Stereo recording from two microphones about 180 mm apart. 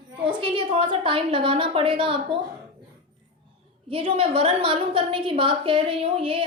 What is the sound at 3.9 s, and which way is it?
A woman's voice, 30° right (ahead or behind).